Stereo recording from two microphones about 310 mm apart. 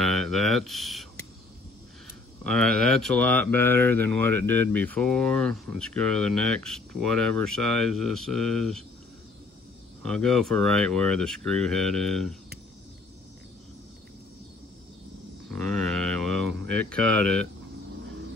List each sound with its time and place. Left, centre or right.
0.0 s speech: centre
2.4 s speech: centre
10.0 s speech: centre
15.5 s speech: centre